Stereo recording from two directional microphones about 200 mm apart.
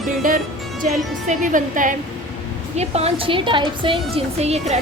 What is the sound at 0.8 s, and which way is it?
A woman's voice, 40° right (ahead or behind).